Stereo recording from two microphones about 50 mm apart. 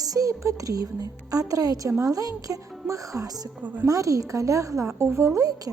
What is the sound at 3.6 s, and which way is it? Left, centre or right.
Speech, right.